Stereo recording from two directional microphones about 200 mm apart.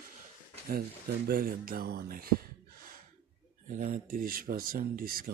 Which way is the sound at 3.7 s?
45° right (ahead or behind).